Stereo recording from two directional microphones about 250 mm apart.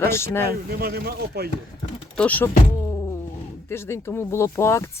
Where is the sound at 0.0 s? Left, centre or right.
Centre.